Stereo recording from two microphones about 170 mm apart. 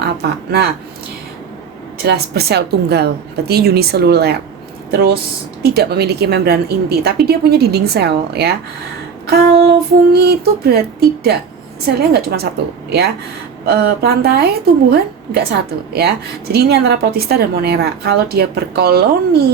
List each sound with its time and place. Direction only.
0.0 s speech: 70° right (ahead or behind)
2.0 s a woman's voice: 70° right (ahead or behind)
13.7 s a woman's voice: 70° right (ahead or behind)